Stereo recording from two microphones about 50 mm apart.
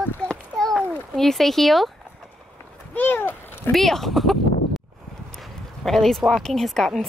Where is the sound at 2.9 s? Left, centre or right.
Left.